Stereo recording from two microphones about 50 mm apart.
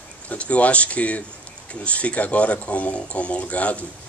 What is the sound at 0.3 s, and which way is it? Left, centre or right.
Speech, left.